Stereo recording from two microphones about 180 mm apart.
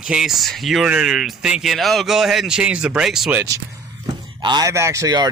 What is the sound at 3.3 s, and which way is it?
Speech, 20° right (ahead or behind).